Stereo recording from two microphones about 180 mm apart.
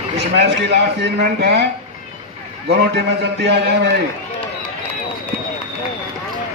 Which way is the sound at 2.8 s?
65° right (ahead or behind).